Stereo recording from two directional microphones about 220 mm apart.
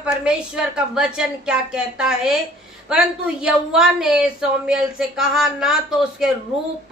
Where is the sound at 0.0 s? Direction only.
5° right (ahead or behind).